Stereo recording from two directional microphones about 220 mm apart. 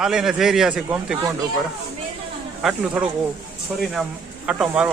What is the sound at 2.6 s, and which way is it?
Speech, 5° right (ahead or behind).